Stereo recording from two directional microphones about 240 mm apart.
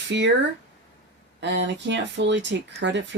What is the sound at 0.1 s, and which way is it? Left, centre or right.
Speech, right.